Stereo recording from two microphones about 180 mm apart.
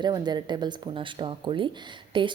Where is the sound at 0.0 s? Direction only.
25° right (ahead or behind).